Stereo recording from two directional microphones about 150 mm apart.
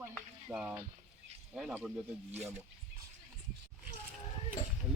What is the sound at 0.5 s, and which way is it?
Speech, 10° right (ahead or behind).